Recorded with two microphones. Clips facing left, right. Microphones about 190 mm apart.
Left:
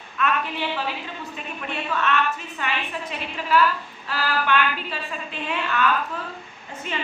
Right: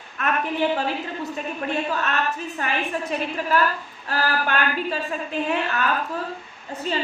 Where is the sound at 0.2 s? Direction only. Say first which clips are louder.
Right 2 dB; 45° right (ahead or behind).